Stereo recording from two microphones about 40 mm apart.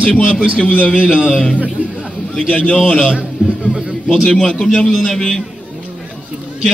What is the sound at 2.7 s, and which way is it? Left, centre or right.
Speech, centre.